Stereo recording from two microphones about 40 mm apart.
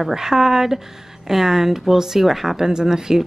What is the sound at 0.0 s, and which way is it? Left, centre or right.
A woman's voice, centre.